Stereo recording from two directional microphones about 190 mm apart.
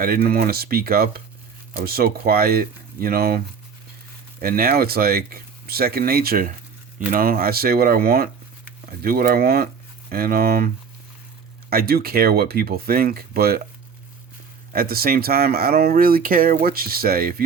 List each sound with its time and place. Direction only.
0.0 s speech: 50° right (ahead or behind)
11.7 s speech: 55° right (ahead or behind)
14.7 s speech: 50° right (ahead or behind)